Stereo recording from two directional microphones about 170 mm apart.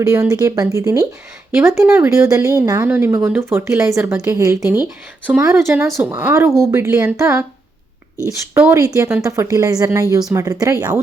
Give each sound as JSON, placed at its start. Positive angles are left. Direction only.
{"t": 0.1, "sound": "a woman's voice", "side_deg": -20}
{"t": 8.5, "sound": "a woman's voice", "side_deg": -10}